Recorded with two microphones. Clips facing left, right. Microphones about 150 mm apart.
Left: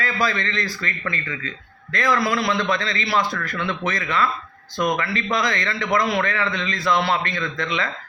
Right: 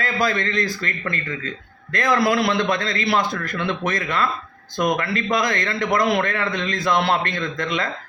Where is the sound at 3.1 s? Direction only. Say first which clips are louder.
Even; 20° right (ahead or behind).